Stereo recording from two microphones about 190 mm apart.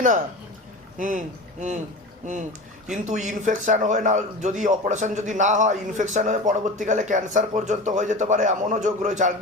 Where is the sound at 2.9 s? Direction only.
40° right (ahead or behind).